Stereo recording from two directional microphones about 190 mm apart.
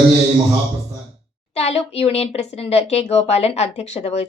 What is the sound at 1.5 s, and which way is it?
Speech, 35° left (ahead or behind).